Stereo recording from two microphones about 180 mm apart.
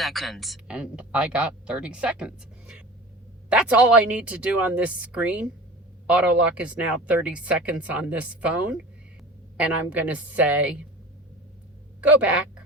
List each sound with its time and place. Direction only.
0.0 s speech: centre (ahead or behind)
9.6 s speech: 10° right (ahead or behind)
11.9 s speech: 10° right (ahead or behind)